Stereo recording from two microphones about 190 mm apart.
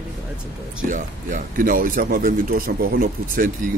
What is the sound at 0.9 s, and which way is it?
Speech, 45° right (ahead or behind).